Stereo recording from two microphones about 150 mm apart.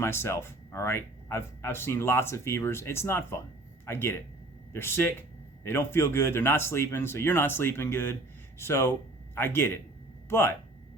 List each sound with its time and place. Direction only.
0.0 s speech: 15° left (ahead or behind)